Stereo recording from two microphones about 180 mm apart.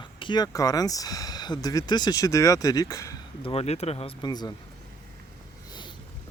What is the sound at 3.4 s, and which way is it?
Speech, 30° left (ahead or behind).